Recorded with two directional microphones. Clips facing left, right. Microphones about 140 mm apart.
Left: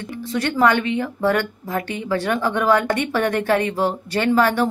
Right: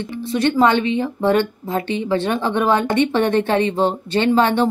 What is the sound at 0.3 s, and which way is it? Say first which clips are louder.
A woman's voice: right 2 dB; 20° right (ahead or behind).